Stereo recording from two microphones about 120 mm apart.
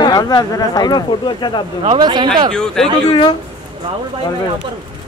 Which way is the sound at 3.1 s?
45° left (ahead or behind).